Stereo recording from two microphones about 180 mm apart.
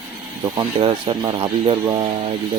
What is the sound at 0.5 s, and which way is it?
Speech, 30° right (ahead or behind).